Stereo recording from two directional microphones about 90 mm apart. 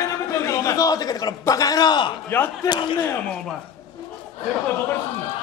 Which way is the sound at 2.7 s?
60° left (ahead or behind).